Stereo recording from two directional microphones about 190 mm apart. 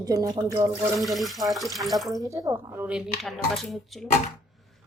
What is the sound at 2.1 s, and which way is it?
Speech, 20° right (ahead or behind).